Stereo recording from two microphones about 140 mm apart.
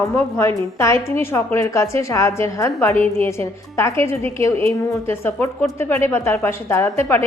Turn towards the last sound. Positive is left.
turn(degrees=15)  # may be behind; listen again after turning